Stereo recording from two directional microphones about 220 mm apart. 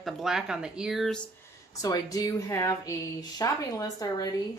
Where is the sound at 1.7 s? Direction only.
15° left (ahead or behind).